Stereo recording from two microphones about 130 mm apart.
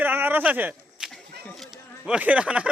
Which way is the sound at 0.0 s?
15° right (ahead or behind).